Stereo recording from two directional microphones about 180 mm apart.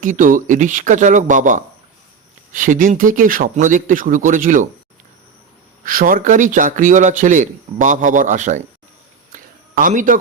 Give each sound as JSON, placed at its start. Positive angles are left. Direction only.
{"t": 0.0, "sound": "a man's voice", "side_deg": -45}
{"t": 5.8, "sound": "a man's voice", "side_deg": -50}
{"t": 9.3, "sound": "a sound", "side_deg": -50}